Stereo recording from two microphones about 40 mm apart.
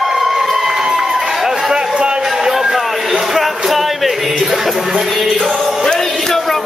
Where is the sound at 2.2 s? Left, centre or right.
Centre.